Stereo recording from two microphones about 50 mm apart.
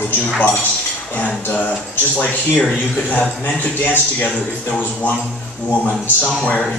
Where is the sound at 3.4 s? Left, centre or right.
Left.